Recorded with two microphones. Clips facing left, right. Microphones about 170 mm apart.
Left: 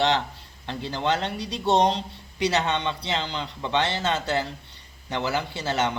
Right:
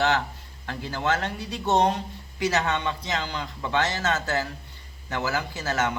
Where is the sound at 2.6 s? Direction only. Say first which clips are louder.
Left 1 dB; 20° left (ahead or behind).